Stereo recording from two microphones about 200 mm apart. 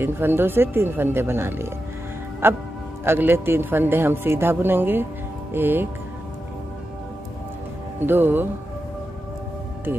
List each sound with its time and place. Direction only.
0.0 s a man's voice: 10° right (ahead or behind)
8.0 s a man's voice: 10° right (ahead or behind)